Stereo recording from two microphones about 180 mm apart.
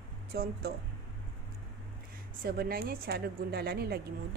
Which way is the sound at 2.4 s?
55° right (ahead or behind).